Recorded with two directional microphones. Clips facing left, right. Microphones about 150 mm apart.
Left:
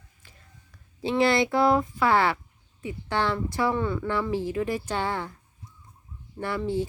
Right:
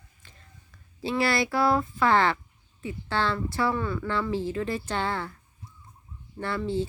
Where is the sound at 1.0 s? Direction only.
20° left (ahead or behind).